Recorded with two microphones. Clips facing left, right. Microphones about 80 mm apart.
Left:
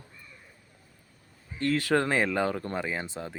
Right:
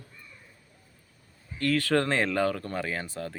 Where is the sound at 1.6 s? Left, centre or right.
Left.